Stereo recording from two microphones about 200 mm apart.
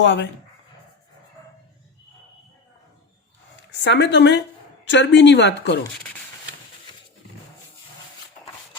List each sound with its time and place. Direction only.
0.0 s a woman's voice: 65° left (ahead or behind)
3.8 s a woman's voice: 60° left (ahead or behind)